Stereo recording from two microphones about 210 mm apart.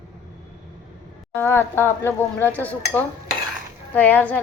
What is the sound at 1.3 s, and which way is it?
Speech, 10° left (ahead or behind).